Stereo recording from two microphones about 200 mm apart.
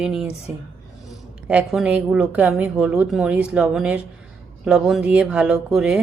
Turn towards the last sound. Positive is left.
turn(degrees=-5)  # may be behind; listen again after turning